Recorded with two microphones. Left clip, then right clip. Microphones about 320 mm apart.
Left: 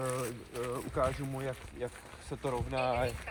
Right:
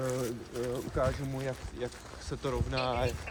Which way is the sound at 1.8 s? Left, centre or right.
Left.